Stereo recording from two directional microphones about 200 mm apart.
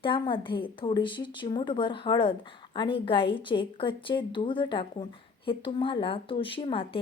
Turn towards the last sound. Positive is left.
turn(degrees=25)  # may be behind; listen again after turning